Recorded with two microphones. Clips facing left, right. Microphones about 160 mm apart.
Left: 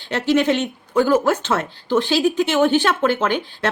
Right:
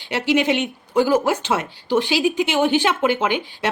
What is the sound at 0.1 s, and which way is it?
Speech, 10° right (ahead or behind).